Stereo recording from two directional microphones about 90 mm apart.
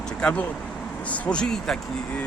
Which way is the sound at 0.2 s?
15° left (ahead or behind).